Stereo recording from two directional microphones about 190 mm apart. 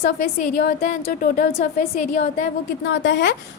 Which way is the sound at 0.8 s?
45° left (ahead or behind).